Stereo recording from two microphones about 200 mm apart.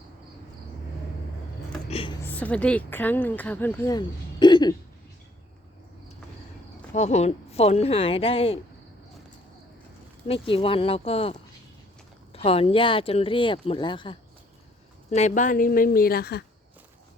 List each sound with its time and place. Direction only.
1.9 s a sound: 30° left (ahead or behind)
2.3 s speech: 5° left (ahead or behind)
6.9 s a woman's voice: 35° left (ahead or behind)
10.2 s speech: 25° left (ahead or behind)
15.1 s a woman's voice: 35° left (ahead or behind)